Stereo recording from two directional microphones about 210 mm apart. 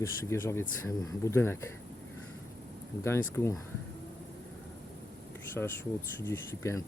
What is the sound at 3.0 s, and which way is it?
Speech, 10° left (ahead or behind).